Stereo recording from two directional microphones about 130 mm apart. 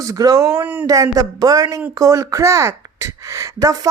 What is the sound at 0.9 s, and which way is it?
A woman's voice, 25° right (ahead or behind).